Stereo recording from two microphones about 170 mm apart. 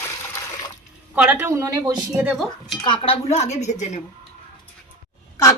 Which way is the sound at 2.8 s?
30° left (ahead or behind).